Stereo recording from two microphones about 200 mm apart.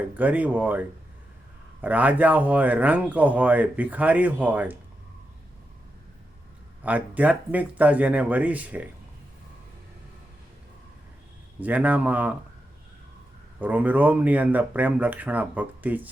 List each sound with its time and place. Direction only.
0.1 s speech: 10° right (ahead or behind)
6.8 s speech: 5° right (ahead or behind)
11.6 s speech: 10° right (ahead or behind)
13.6 s speech: 10° right (ahead or behind)